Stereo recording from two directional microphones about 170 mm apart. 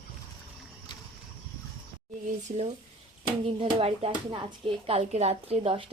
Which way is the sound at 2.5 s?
40° right (ahead or behind).